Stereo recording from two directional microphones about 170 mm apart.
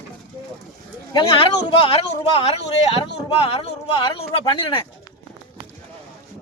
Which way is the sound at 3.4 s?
35° left (ahead or behind).